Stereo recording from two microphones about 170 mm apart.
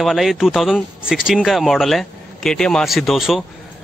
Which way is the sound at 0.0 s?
Centre (ahead or behind).